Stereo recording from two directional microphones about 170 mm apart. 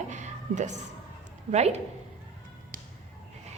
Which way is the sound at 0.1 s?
45° right (ahead or behind).